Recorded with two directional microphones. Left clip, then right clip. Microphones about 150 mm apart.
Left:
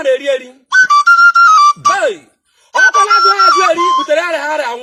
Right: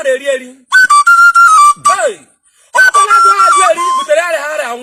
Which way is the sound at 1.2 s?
55° left (ahead or behind).